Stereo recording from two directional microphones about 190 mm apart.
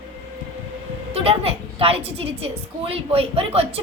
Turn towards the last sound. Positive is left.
turn(degrees=-30)  # may be behind; listen again after turning